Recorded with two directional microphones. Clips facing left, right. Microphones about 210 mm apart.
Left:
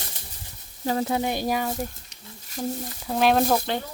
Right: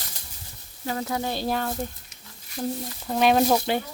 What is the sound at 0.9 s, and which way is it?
Speech, 30° left (ahead or behind).